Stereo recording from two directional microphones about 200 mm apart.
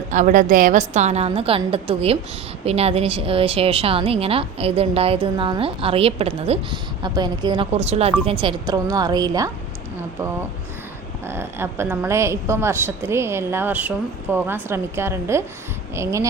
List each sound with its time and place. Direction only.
0.1 s a woman's voice: 40° right (ahead or behind); by 9.5 s 20° right (ahead or behind)
11.3 s a woman's voice: 10° right (ahead or behind)